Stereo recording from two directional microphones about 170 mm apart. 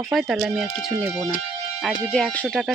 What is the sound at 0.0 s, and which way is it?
Speech, centre (ahead or behind).